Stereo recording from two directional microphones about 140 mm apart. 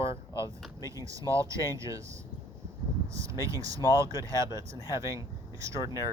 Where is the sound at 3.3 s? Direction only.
25° right (ahead or behind).